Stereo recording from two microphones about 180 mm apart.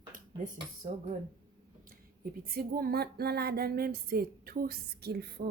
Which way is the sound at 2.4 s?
55° right (ahead or behind).